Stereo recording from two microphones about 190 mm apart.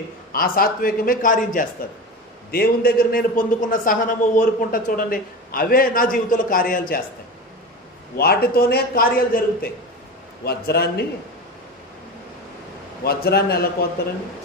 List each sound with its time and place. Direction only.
0.3 s a man's voice: 50° left (ahead or behind)
8.2 s a man's voice: 55° left (ahead or behind)
13.0 s a man's voice: 55° left (ahead or behind)